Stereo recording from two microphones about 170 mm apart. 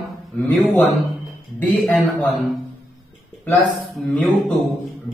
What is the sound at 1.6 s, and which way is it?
Speech, 10° left (ahead or behind).